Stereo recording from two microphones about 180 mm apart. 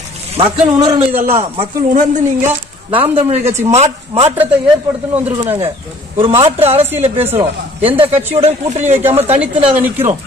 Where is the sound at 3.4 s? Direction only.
15° right (ahead or behind).